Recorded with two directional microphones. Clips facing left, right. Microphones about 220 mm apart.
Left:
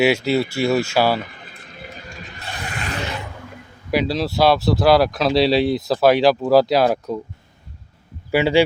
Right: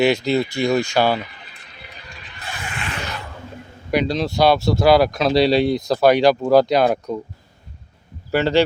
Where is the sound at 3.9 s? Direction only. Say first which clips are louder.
Even; 5° left (ahead or behind).